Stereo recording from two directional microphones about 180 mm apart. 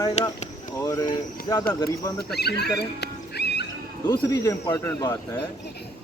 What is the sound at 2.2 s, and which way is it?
Speech, 65° left (ahead or behind).